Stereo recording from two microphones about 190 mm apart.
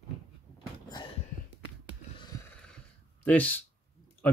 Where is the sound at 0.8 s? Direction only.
25° left (ahead or behind).